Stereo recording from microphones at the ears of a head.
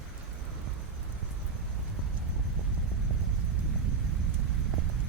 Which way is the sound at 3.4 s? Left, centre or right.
Right.